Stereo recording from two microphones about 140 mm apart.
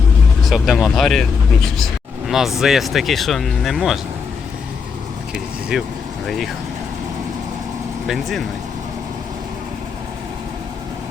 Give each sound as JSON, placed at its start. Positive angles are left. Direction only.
{"t": 0.4, "sound": "speech", "side_deg": 0}
{"t": 5.7, "sound": "speech", "side_deg": -5}
{"t": 8.0, "sound": "speech", "side_deg": 0}